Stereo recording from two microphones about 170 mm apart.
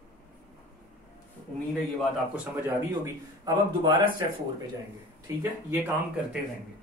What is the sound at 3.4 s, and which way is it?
Speech, 25° right (ahead or behind).